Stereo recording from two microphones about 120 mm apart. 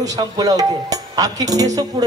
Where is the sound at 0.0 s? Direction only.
30° right (ahead or behind).